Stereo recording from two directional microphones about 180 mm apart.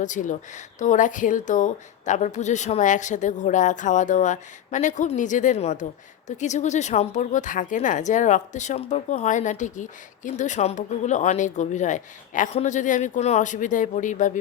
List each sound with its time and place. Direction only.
0.0 s speech: 45° left (ahead or behind)